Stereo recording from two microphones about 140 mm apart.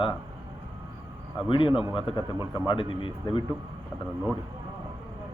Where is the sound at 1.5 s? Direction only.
40° left (ahead or behind).